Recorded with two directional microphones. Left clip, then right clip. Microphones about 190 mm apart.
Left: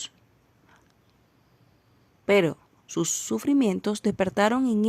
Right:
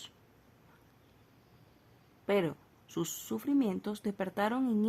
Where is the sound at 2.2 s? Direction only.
35° left (ahead or behind).